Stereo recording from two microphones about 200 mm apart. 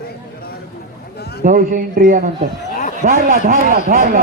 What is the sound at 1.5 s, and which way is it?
A man's voice, 40° right (ahead or behind).